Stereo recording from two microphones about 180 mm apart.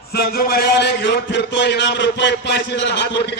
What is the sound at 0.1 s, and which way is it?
A man's voice, 55° left (ahead or behind).